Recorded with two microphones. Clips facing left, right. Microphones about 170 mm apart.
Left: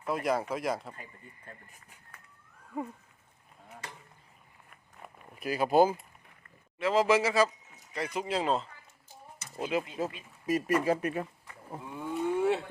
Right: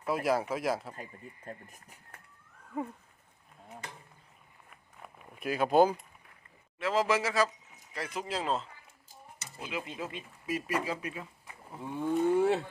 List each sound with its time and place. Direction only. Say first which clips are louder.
0.0 s speech: right 1 dB; 5° right (ahead or behind)
2.7 s speech: even; centre (ahead or behind)
4.9 s a sound: left 1 dB; centre (ahead or behind)
6.7 s speech: left 3 dB; centre (ahead or behind)
9.6 s speech: left 7 dB; 40° left (ahead or behind)
11.9 s a sound: right 4 dB; 35° right (ahead or behind)